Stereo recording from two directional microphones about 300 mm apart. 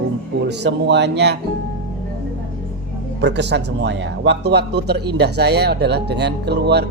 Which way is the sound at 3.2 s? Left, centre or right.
Right.